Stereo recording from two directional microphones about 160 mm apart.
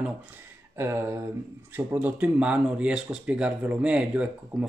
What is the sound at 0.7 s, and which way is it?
Speech, 15° right (ahead or behind).